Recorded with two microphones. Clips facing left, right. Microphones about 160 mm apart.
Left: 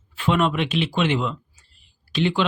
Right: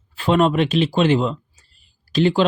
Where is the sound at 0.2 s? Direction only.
35° right (ahead or behind).